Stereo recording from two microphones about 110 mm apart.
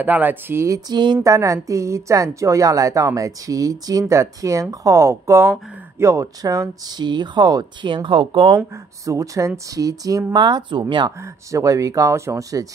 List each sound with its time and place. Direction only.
0.0 s a woman's voice: 15° right (ahead or behind); by 1.2 s 45° right (ahead or behind)
1.2 s a woman's voice: 30° right (ahead or behind); by 8.5 s 50° right (ahead or behind)
9.0 s a woman's voice: 30° right (ahead or behind)
11.5 s speech: 30° right (ahead or behind)